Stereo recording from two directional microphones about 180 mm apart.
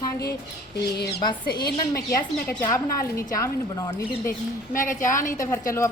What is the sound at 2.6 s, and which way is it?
Speech, 20° left (ahead or behind).